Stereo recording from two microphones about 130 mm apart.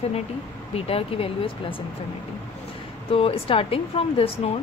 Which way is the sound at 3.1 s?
45° left (ahead or behind).